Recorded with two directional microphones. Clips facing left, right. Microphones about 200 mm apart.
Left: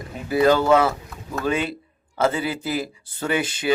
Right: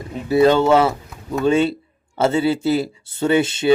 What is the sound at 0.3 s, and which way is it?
Speech, 25° right (ahead or behind).